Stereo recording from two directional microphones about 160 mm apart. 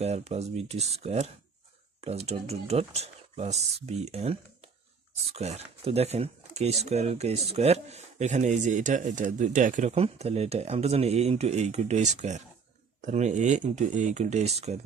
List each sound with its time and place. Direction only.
0.0 s speech: 40° right (ahead or behind)